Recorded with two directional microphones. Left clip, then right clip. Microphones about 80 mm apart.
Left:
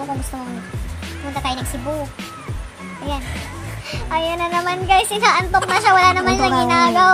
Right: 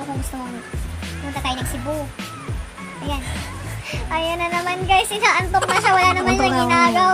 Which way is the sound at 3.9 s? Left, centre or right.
Left.